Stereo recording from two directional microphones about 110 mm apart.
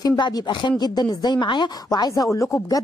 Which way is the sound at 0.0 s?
45° left (ahead or behind).